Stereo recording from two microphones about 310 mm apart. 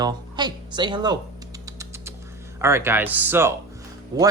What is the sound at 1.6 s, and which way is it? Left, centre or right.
Creak, centre.